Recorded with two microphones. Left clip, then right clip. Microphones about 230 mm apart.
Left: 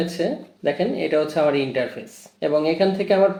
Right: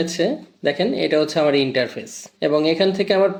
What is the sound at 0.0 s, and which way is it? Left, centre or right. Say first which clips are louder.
Speech: right 3 dB; right.